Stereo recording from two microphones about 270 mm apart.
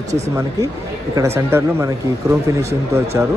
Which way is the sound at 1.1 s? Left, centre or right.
Centre.